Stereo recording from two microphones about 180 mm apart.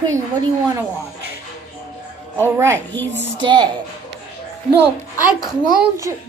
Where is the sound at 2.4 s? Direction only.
15° right (ahead or behind).